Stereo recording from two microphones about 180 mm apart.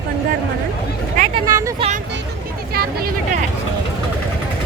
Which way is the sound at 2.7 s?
60° right (ahead or behind).